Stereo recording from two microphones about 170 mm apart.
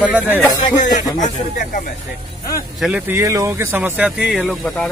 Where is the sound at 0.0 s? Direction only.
10° right (ahead or behind).